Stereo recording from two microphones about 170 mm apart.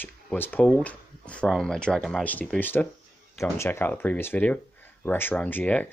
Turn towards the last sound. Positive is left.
turn(degrees=10)  # may be behind; listen again after turning